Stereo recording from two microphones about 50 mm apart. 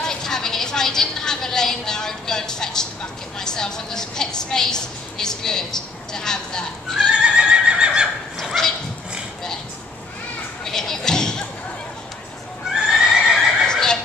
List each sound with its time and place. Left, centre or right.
0.0 s a woman's voice: centre
7.1 s neigh: centre
10.6 s speech: centre
12.8 s neigh: centre
13.7 s fowl: centre